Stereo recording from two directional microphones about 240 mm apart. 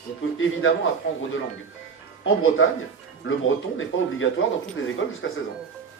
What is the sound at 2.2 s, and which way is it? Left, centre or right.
Speech, left.